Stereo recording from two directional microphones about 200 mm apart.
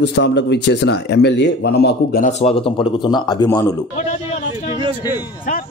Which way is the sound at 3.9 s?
35° left (ahead or behind).